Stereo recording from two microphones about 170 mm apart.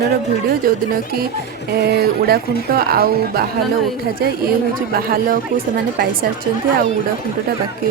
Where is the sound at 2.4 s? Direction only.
65° left (ahead or behind).